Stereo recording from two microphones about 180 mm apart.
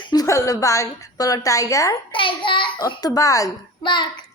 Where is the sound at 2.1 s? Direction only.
30° left (ahead or behind).